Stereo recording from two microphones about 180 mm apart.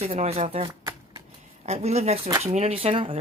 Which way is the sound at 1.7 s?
35° right (ahead or behind).